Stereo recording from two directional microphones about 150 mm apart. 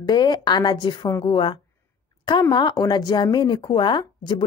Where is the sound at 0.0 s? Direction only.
30° left (ahead or behind).